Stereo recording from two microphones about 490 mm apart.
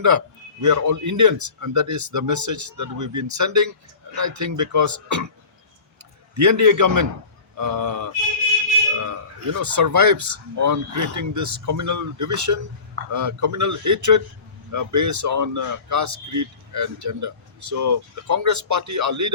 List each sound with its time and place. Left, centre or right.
0.6 s speech: right
6.3 s speech: right